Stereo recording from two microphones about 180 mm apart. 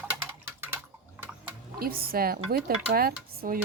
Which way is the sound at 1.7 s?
55° right (ahead or behind).